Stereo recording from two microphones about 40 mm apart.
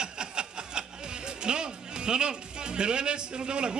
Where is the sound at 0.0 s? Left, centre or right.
Right.